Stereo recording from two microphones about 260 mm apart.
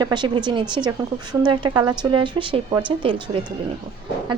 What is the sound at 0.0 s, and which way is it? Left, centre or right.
Speech, centre.